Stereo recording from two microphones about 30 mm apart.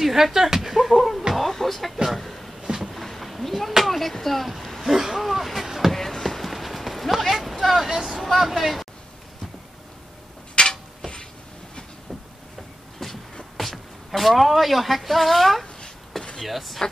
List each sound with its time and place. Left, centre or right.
0.0 s speech: centre
0.7 s slap: centre
0.9 s a sound: centre
1.5 s music: centre
2.1 s a sound: centre
5.9 s clip-clop: centre
7.7 s vehicle: centre
8.2 s a sound: centre
8.5 s speech: centre
10.6 s mechanisms: left
13.0 s beatboxing: centre
13.6 s speech: centre